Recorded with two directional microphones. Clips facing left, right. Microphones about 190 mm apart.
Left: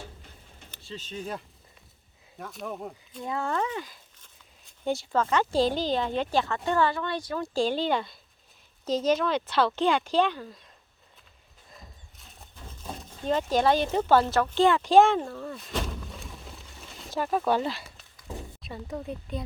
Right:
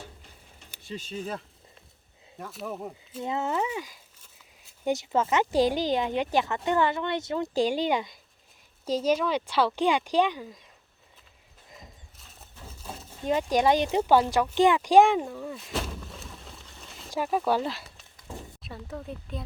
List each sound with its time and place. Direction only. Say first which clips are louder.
0.7 s a sound: right 2 dB; 15° right (ahead or behind)
1.2 s speech: right 1 dB; centre (ahead or behind)
3.2 s speech: right 1 dB; 20° right (ahead or behind)
3.5 s speech: even; 10° right (ahead or behind)
12.1 s a sound: even; centre (ahead or behind)
17.1 s speech: even; 10° right (ahead or behind)